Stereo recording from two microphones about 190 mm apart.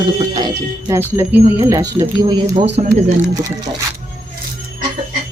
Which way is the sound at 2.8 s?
35° right (ahead or behind).